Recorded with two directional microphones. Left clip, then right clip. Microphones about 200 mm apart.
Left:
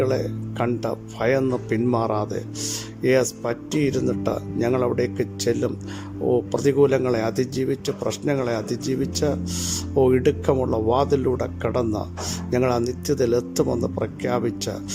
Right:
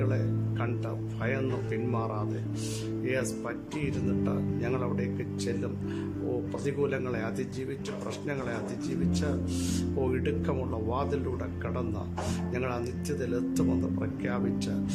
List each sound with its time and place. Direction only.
0.6 s speech: 30° left (ahead or behind)